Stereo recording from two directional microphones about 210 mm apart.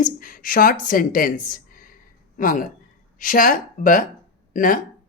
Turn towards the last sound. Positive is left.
turn(degrees=40)  # may be behind; listen again after turning